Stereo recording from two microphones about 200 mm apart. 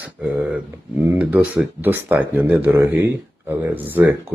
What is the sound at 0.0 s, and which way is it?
Speech, 5° right (ahead or behind).